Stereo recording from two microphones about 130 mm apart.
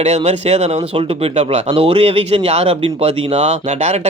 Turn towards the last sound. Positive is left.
turn(degrees=-65)  # may be behind; listen again after turning